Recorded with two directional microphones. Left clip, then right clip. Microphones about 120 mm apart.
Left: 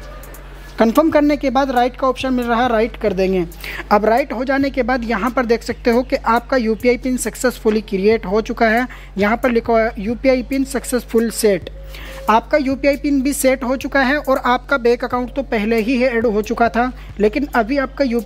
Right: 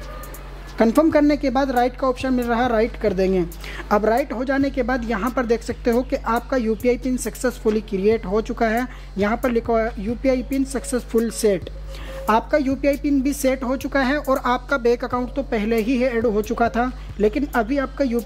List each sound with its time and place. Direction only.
0.7 s a woman's voice: 15° left (ahead or behind)